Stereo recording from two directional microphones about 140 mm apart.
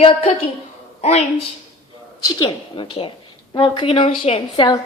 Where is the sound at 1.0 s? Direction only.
50° left (ahead or behind).